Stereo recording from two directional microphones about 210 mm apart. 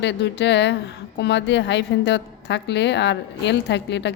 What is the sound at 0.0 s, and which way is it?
A woman's voice, 55° left (ahead or behind).